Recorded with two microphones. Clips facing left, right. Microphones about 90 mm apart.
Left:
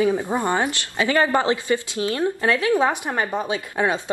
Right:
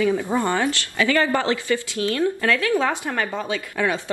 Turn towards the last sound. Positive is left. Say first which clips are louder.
# left 1 dB
turn(degrees=25)  # may be behind; listen again after turning